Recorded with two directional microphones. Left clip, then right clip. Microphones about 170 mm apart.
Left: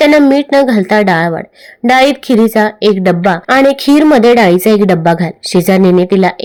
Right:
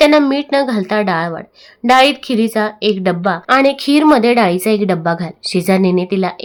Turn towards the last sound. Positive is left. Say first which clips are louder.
# left 7 dB
turn(degrees=25)  # may be behind; listen again after turning